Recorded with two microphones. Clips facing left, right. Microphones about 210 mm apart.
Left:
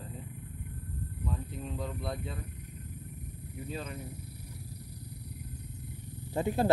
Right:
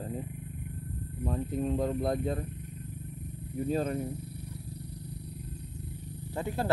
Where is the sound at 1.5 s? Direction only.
45° right (ahead or behind).